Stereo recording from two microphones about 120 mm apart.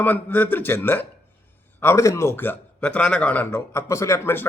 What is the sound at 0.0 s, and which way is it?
A man's voice, 15° left (ahead or behind).